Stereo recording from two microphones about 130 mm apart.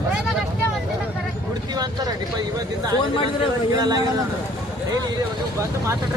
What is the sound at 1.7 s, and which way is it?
Vehicle, 30° right (ahead or behind).